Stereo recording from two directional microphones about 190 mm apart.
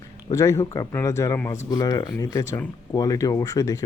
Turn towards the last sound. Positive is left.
turn(degrees=20)  # may be behind; listen again after turning